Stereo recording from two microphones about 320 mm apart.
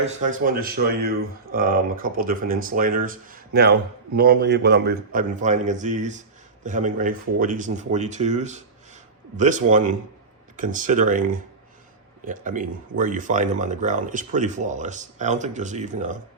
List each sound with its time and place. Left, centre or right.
0.0 s speech: right